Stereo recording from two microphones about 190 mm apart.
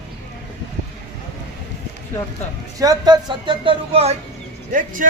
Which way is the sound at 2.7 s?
20° right (ahead or behind).